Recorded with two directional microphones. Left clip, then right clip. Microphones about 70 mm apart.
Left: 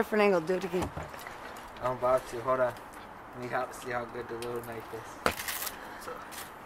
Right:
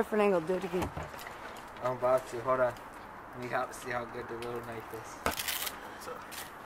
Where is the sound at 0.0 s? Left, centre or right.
Centre.